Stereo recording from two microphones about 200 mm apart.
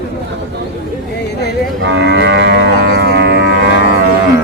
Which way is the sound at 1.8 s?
60° right (ahead or behind).